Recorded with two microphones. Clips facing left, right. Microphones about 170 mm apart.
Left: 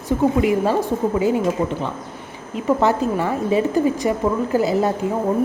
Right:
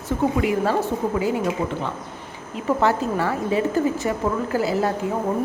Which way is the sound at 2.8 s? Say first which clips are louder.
Even; 15° left (ahead or behind).